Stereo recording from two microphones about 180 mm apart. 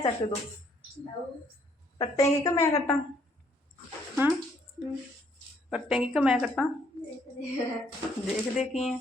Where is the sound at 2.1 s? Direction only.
20° left (ahead or behind).